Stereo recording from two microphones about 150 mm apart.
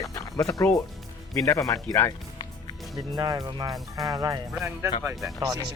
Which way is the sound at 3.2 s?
25° right (ahead or behind).